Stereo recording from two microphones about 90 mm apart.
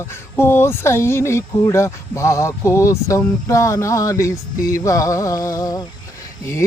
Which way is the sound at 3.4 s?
35° left (ahead or behind).